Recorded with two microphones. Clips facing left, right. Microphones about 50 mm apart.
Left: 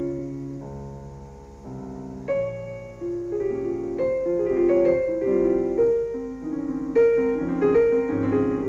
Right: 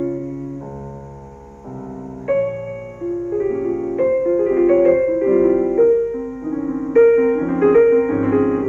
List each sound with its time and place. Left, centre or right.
2.2 s music: right